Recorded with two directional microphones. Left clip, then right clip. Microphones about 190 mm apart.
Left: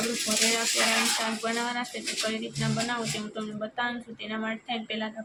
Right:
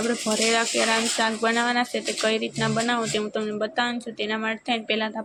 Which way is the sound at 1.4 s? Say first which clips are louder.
Right 7 dB; 40° right (ahead or behind).